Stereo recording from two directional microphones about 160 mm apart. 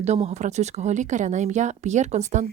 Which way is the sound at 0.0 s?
40° right (ahead or behind).